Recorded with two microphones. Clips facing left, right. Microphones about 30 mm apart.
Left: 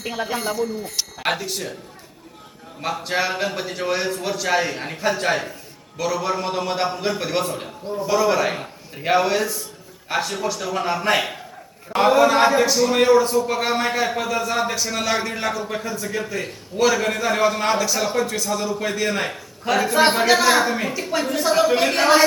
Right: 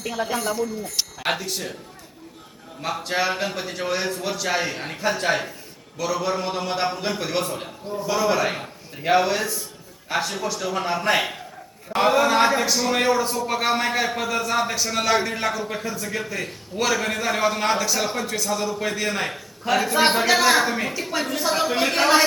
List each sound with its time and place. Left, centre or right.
0.0 s speech: centre
0.6 s speech: left
1.3 s a man's voice: centre
3.0 s a man's voice: centre